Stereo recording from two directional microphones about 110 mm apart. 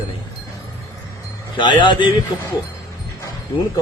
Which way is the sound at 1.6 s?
45° left (ahead or behind).